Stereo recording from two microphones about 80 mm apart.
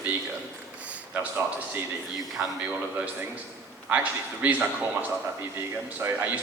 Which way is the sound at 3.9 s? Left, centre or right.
Centre.